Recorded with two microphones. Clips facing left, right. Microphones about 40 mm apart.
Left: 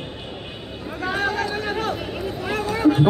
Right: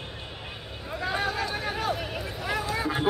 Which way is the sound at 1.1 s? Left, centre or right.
Left.